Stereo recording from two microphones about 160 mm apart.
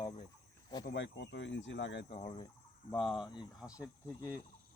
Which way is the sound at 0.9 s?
90° left.